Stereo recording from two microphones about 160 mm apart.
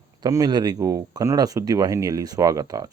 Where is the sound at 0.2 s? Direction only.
25° right (ahead or behind).